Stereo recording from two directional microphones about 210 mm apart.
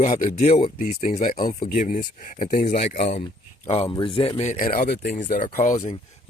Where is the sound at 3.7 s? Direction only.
25° left (ahead or behind).